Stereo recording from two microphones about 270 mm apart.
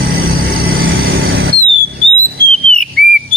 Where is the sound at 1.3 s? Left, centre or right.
Right.